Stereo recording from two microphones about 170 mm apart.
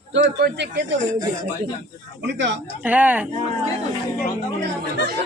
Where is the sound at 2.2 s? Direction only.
90° right.